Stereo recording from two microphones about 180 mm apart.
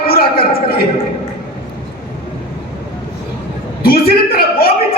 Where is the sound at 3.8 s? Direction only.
55° left (ahead or behind).